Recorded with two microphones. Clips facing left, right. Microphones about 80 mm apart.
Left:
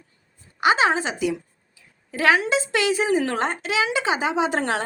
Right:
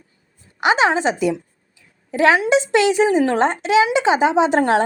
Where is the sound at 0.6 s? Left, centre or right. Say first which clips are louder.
Right 3 dB; right.